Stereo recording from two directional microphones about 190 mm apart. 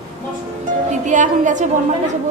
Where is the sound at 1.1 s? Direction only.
40° right (ahead or behind).